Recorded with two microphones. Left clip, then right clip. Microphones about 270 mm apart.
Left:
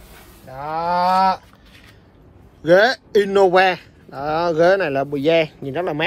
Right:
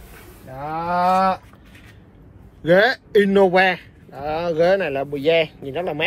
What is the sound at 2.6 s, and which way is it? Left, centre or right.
A man's voice, centre.